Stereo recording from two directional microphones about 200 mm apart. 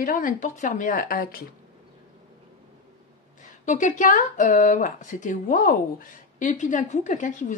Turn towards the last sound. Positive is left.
turn(degrees=40)  # may be behind; listen again after turning